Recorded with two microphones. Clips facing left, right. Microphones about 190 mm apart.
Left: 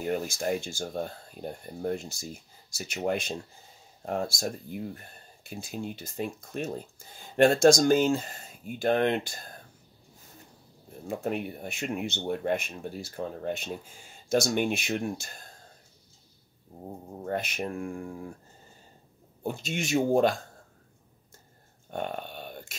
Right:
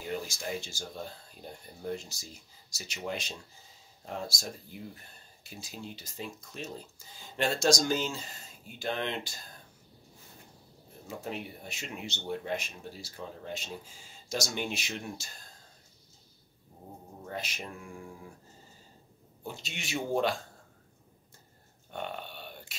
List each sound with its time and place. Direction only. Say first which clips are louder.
0.0 s speech: left 7 dB; 55° left (ahead or behind)
11.1 s speech: left 8 dB; 55° left (ahead or behind)
17.2 s speech: left 9 dB; 55° left (ahead or behind)
19.4 s speech: left 10 dB; 50° left (ahead or behind)
21.9 s a sound: left 5 dB; 45° left (ahead or behind)